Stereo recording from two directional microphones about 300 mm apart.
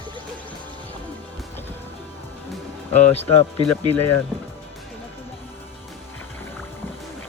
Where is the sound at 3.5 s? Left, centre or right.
Centre.